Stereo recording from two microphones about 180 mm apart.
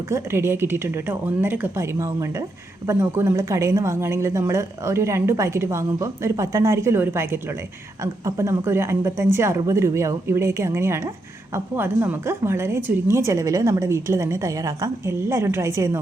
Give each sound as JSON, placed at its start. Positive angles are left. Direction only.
{"t": 0.1, "sound": "a woman's voice", "side_deg": -15}